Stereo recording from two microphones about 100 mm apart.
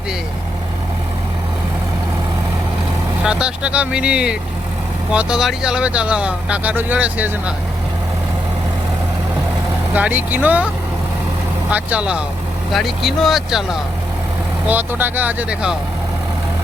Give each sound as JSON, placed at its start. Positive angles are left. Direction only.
{"t": 3.2, "sound": "speech", "side_deg": -10}
{"t": 9.9, "sound": "speech", "side_deg": -15}
{"t": 11.7, "sound": "speech", "side_deg": -15}
{"t": 12.7, "sound": "speech", "side_deg": 0}
{"t": 14.7, "sound": "speech", "side_deg": -20}